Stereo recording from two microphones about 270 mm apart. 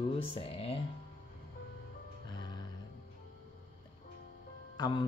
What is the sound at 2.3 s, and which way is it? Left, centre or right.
Music, centre.